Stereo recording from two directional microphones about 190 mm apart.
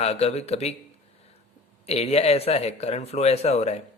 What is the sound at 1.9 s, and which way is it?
Speech, 35° left (ahead or behind).